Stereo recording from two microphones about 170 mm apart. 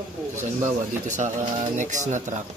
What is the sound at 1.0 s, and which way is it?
Speech, 45° right (ahead or behind).